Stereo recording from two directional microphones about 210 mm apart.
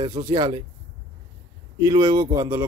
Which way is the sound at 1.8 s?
15° right (ahead or behind).